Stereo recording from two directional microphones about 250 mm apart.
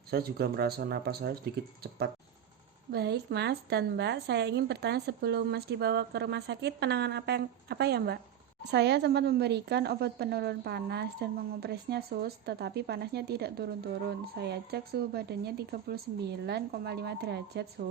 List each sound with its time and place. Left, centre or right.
0.1 s a woman's voice: right
2.9 s a woman's voice: right